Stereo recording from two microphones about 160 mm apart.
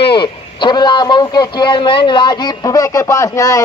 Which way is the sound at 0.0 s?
30° left (ahead or behind).